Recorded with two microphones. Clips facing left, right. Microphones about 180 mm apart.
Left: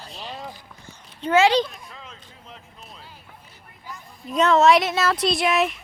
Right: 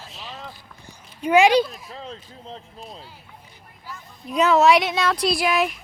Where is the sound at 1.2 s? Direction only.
15° right (ahead or behind).